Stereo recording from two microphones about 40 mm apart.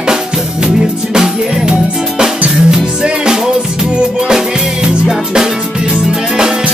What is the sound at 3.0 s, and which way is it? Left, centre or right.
Music, centre.